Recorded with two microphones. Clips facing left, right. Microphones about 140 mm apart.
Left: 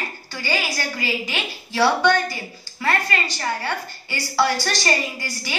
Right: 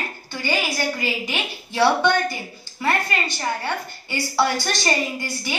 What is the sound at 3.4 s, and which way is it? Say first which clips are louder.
A woman's voice: even; 20° right (ahead or behind).